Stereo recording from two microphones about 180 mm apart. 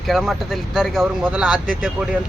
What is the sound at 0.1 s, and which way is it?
Speech, centre (ahead or behind).